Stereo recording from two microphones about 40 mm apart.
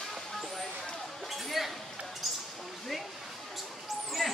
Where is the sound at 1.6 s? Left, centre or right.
Centre.